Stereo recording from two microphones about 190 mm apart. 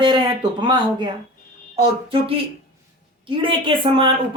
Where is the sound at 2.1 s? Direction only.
30° right (ahead or behind).